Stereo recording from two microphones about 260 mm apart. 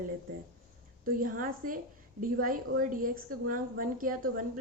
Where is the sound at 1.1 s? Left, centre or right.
Right.